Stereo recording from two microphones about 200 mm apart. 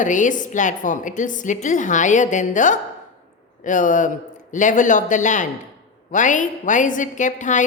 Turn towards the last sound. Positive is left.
turn(degrees=40)  # may be behind; listen again after turning